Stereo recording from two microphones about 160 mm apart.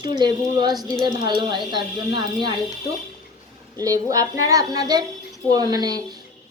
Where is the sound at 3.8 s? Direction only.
20° right (ahead or behind).